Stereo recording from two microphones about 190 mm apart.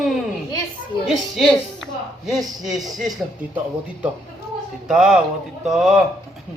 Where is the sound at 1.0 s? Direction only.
Centre (ahead or behind).